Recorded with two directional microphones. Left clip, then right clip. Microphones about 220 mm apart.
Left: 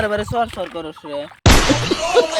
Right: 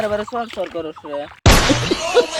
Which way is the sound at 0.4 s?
30° left (ahead or behind).